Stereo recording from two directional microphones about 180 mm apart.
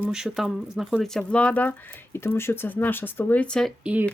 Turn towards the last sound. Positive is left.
turn(degrees=-5)  # may be behind; listen again after turning